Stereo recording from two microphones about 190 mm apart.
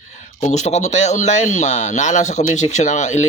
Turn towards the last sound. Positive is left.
turn(degrees=40)  # may be behind; listen again after turning